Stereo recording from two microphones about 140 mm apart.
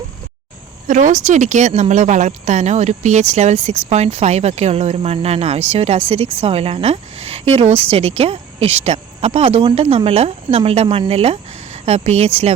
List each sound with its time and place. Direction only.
0.9 s speech: 60° right (ahead or behind); by 12.5 s 45° right (ahead or behind)